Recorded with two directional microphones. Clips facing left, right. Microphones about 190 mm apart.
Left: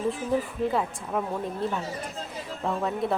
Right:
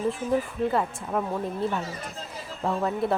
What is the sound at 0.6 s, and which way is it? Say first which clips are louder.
Speech: right 1 dB; centre (ahead or behind).